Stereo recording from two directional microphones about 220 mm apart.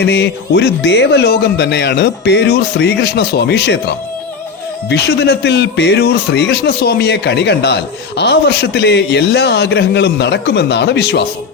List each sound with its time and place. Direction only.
0.0 s a man's voice: 50° left (ahead or behind)